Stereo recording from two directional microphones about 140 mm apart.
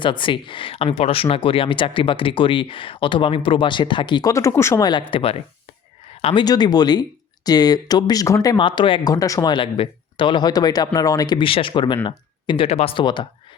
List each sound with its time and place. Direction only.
0.0 s speech: 35° left (ahead or behind)
4.3 s speech: 20° left (ahead or behind)
4.9 s speech: 35° left (ahead or behind)